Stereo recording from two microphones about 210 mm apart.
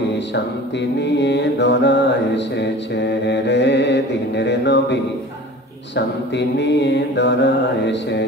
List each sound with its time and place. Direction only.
0.3 s music: 55° left (ahead or behind)